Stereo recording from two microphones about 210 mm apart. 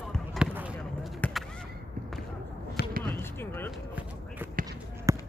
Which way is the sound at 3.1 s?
10° left (ahead or behind).